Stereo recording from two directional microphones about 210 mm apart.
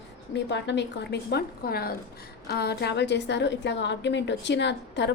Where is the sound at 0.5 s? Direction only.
55° left (ahead or behind).